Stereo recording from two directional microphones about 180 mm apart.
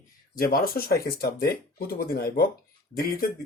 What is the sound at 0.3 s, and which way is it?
Speech, 55° left (ahead or behind).